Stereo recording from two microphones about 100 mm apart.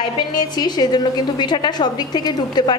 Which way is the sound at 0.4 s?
45° left (ahead or behind).